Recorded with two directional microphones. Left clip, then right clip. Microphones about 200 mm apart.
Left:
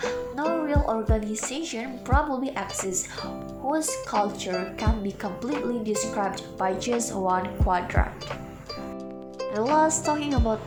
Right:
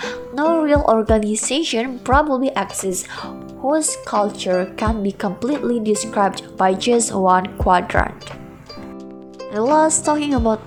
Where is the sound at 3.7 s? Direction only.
35° right (ahead or behind).